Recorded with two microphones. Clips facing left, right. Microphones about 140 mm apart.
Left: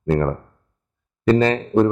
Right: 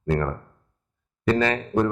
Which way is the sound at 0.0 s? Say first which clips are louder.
Left 5 dB; 35° left (ahead or behind).